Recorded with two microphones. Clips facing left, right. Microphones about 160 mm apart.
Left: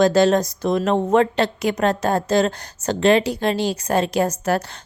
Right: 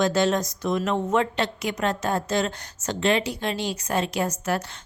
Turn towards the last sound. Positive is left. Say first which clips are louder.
# left 6 dB
turn(degrees=35)  # may be behind; listen again after turning